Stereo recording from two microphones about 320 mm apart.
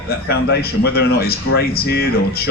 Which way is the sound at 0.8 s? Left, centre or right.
Left.